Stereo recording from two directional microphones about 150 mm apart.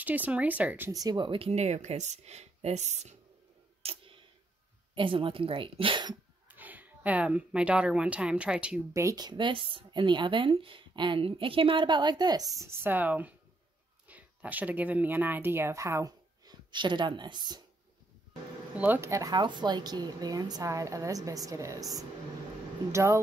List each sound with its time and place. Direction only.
0.0 s speech: 10° right (ahead or behind)
0.9 s speech: 30° right (ahead or behind); by 3.2 s 50° right (ahead or behind)
3.8 s tick: 35° right (ahead or behind)
4.9 s speech: 35° right (ahead or behind)
6.5 s speech: 10° right (ahead or behind)
8.9 s speech: 25° right (ahead or behind)
18.8 s speech: 15° right (ahead or behind)
22.8 s speech: 20° right (ahead or behind)